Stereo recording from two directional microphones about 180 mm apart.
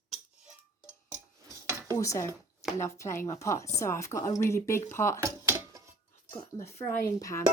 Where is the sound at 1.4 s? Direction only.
15° right (ahead or behind).